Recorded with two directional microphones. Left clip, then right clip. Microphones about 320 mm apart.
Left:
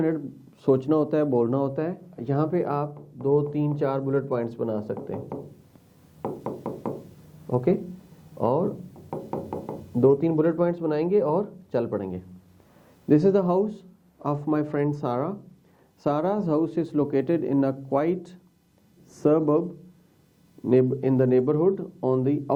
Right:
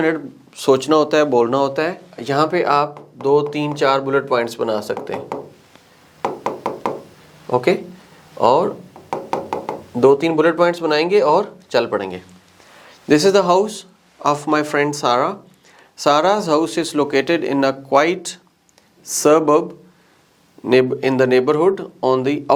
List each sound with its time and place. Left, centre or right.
0.0 s speech: centre
6.2 s knock: centre
7.4 s a man's voice: centre
20.7 s speech: centre